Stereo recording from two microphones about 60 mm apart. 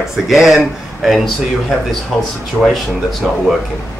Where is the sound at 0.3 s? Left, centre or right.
Centre.